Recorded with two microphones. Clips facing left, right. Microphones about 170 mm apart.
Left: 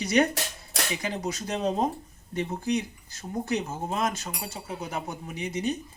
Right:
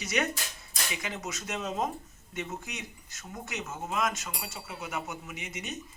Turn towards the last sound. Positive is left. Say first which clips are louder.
# left 10 dB
turn(degrees=35)  # may be behind; listen again after turning